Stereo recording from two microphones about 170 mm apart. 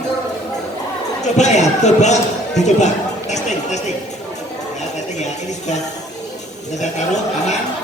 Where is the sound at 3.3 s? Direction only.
45° left (ahead or behind).